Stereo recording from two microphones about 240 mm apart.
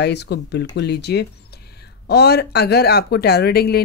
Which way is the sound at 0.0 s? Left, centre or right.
Left.